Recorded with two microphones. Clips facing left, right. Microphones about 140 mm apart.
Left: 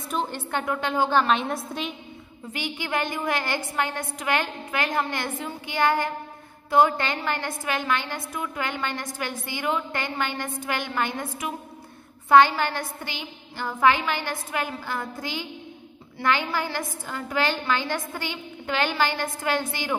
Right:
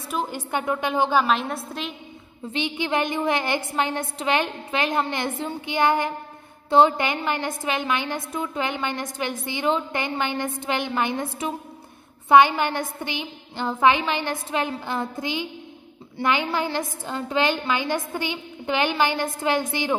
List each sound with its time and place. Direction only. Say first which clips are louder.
0.1 s a woman's voice: right 1 dB; 10° right (ahead or behind)
1.2 s a woman's voice: even; centre (ahead or behind)
2.5 s a woman's voice: right 4 dB; 20° right (ahead or behind)